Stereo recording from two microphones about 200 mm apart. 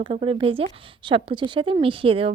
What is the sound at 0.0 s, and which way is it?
A woman's voice, 25° right (ahead or behind).